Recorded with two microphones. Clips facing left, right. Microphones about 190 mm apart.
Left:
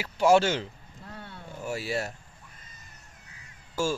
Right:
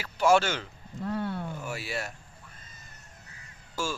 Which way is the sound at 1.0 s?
65° right (ahead or behind).